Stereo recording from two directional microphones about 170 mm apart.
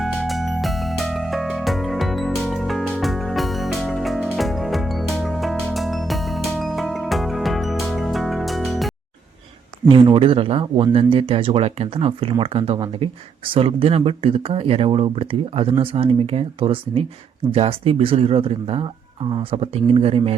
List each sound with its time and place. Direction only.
0.0 s music: centre (ahead or behind)
9.9 s speech: 30° right (ahead or behind)